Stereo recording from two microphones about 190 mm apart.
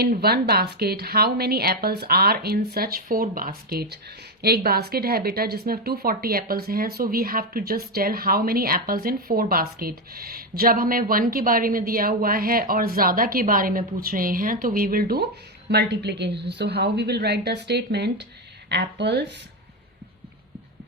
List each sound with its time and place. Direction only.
0.0 s a woman's voice: 55° right (ahead or behind)